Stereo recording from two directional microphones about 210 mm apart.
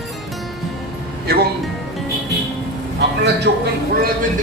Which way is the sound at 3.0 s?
55° right (ahead or behind).